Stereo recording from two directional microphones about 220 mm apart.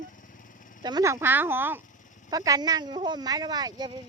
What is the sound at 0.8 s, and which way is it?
Speech, 20° right (ahead or behind).